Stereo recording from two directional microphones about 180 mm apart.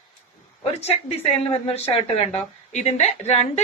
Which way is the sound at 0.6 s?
35° left (ahead or behind).